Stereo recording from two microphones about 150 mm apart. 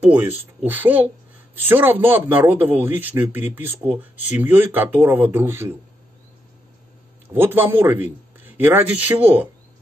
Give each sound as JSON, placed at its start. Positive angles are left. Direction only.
{"t": 0.0, "sound": "a man's voice", "side_deg": -10}
{"t": 7.2, "sound": "a man's voice", "side_deg": -15}